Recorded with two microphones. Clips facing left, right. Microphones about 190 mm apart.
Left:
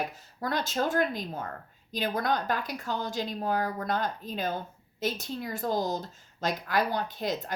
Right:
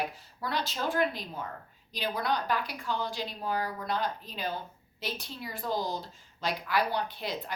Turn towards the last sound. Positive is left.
turn(degrees=45)  # may be behind; listen again after turning